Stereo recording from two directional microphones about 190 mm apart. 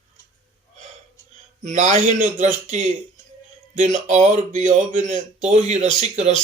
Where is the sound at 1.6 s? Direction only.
40° right (ahead or behind).